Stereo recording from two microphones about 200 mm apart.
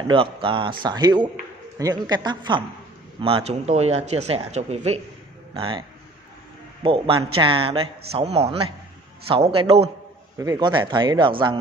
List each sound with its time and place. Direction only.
0.1 s speech: 25° right (ahead or behind)